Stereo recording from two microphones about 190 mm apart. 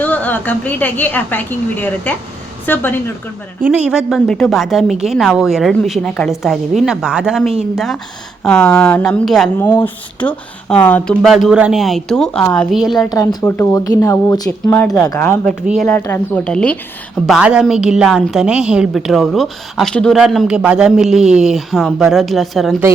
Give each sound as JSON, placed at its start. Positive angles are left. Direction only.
{"t": 0.0, "sound": "a woman's voice", "side_deg": 10}
{"t": 3.6, "sound": "a woman's voice", "side_deg": -5}
{"t": 13.0, "sound": "a woman's voice", "side_deg": 20}
{"t": 14.8, "sound": "a woman's voice", "side_deg": 5}
{"t": 15.0, "sound": "a woman's voice", "side_deg": 15}
{"t": 15.6, "sound": "a woman's voice", "side_deg": -5}
{"t": 15.9, "sound": "a woman's voice", "side_deg": 10}